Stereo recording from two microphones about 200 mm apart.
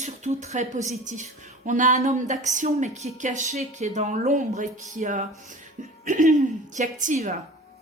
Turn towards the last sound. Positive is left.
turn(degrees=-40)  # may be behind; listen again after turning